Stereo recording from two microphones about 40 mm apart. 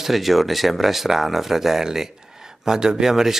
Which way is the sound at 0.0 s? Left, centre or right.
Centre.